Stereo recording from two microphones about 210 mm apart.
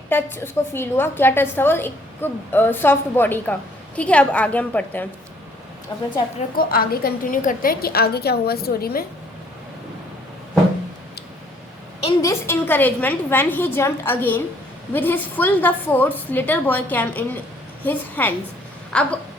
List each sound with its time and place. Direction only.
0.1 s a woman's voice: 10° left (ahead or behind)
5.9 s a woman's voice: 20° left (ahead or behind)
6.6 s a woman's voice: 45° left (ahead or behind)
12.2 s a woman's voice: 15° left (ahead or behind)
18.9 s a sound: 5° left (ahead or behind)